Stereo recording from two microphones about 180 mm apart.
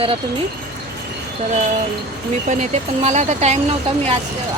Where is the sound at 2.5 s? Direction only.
40° right (ahead or behind).